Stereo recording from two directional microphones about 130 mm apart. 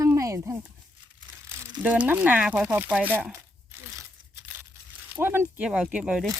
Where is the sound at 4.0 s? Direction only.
20° right (ahead or behind).